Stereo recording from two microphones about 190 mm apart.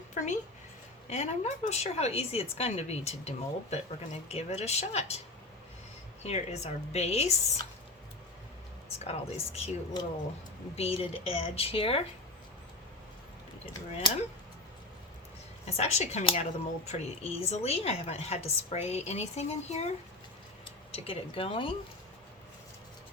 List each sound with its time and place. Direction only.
0.1 s a sound: 40° left (ahead or behind)
1.1 s speech: 35° left (ahead or behind)
6.2 s speech: 35° left (ahead or behind)
9.0 s speech: 35° left (ahead or behind)
15.6 s speech: 35° left (ahead or behind)